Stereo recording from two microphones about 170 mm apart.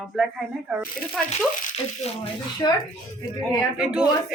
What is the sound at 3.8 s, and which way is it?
Speech, 5° right (ahead or behind).